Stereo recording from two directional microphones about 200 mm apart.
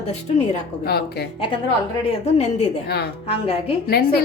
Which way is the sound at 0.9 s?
55° left (ahead or behind).